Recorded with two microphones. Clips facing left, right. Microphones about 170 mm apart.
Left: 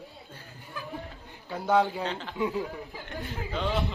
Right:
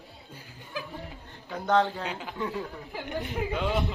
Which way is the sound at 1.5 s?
10° left (ahead or behind).